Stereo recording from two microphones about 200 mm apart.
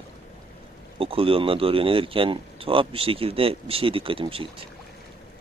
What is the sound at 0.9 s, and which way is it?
Speech, 25° right (ahead or behind).